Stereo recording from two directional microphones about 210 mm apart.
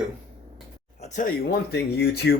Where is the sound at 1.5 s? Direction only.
50° left (ahead or behind).